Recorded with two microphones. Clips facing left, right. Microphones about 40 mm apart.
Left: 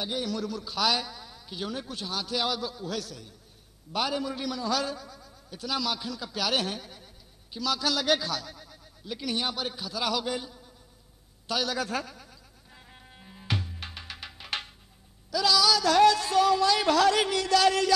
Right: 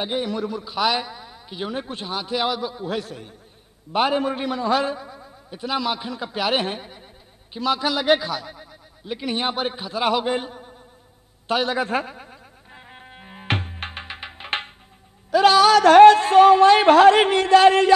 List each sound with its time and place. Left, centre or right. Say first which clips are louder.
0.0 s a man's voice: right 6 dB; right
11.4 s music: right 7 dB; right
15.3 s a man's voice: right 10 dB; right